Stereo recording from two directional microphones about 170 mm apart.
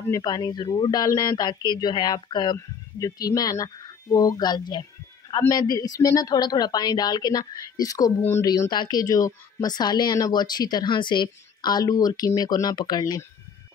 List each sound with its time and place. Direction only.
0.1 s a woman's voice: 25° left (ahead or behind)